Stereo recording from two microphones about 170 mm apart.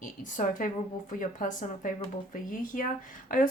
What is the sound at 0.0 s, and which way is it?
A woman's voice, 50° left (ahead or behind).